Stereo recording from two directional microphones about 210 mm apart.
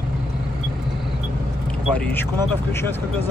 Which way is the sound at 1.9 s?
5° left (ahead or behind).